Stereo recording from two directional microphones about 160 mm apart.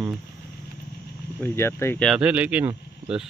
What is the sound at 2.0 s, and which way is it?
Speech, 5° right (ahead or behind).